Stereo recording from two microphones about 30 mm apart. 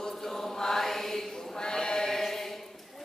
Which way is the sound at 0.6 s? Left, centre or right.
Centre.